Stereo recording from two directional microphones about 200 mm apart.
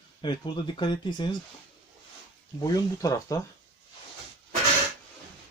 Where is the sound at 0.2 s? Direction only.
20° left (ahead or behind).